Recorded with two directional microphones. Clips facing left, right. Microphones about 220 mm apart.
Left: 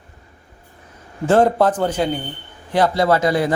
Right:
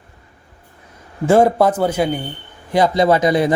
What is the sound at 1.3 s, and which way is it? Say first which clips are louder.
A man's voice: right 2 dB; 10° right (ahead or behind).